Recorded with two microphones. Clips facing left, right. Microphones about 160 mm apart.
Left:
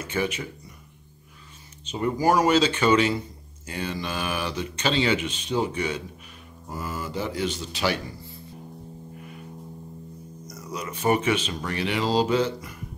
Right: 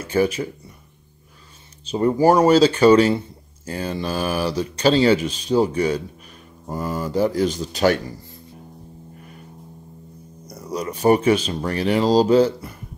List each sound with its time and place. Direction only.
0.0 s speech: 35° right (ahead or behind)
1.9 s a man's voice: 35° right (ahead or behind)
10.5 s a man's voice: 35° right (ahead or behind)